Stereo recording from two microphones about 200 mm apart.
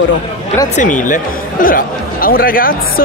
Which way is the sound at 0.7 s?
40° left (ahead or behind).